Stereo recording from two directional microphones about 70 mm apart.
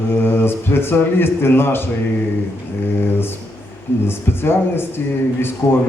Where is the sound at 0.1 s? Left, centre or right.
Left.